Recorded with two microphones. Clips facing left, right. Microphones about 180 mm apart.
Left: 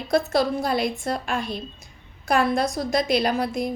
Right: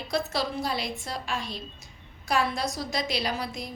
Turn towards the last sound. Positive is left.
turn(degrees=50)  # may be behind; listen again after turning